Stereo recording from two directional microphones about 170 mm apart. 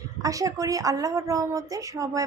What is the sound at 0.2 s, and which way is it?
A woman's voice, 20° right (ahead or behind).